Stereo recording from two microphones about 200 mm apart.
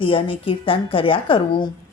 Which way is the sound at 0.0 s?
25° left (ahead or behind).